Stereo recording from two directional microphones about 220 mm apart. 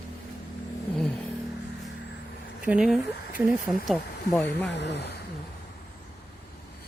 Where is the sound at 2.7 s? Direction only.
5° right (ahead or behind).